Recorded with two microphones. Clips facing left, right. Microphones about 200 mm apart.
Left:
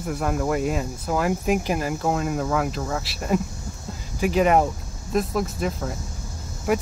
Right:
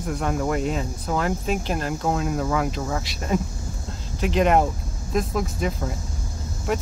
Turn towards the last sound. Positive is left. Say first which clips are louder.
# left 3 dB
turn(degrees=10)  # may be behind; listen again after turning